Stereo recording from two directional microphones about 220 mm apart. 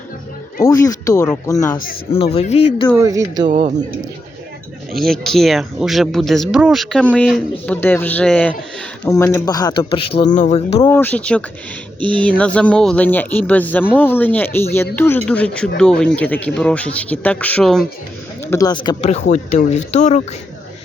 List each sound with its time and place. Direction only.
0.6 s speech: 15° left (ahead or behind)
2.3 s speech: 30° left (ahead or behind)
3.0 s speech: 15° right (ahead or behind)
3.4 s speech: 35° right (ahead or behind)
4.9 s speech: centre (ahead or behind); by 10.8 s 35° left (ahead or behind)
10.8 s speech: 10° left (ahead or behind)
11.9 s speech: 20° right (ahead or behind)
12.4 s speech: 5° left (ahead or behind)
18.5 s speech: 20° left (ahead or behind)